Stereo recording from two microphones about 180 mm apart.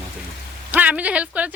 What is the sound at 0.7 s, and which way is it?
Speech, 10° right (ahead or behind).